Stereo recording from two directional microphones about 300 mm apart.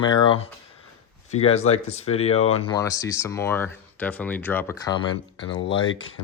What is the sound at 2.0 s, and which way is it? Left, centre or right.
Speech, left.